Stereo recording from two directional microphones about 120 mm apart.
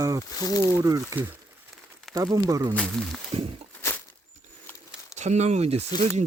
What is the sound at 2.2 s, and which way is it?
Speech, 30° right (ahead or behind).